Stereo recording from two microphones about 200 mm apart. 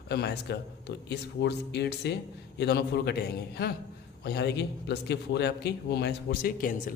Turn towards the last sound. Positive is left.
turn(degrees=45)  # may be behind; listen again after turning